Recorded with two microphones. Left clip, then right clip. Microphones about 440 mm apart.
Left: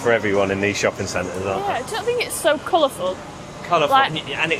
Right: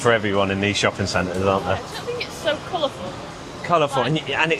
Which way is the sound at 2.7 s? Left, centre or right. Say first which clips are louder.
Left 8 dB; left.